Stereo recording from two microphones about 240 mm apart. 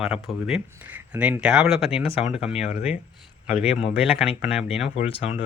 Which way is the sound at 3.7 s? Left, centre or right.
Centre.